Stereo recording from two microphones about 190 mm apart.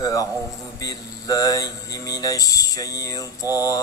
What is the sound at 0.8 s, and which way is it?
Mantra, 20° left (ahead or behind).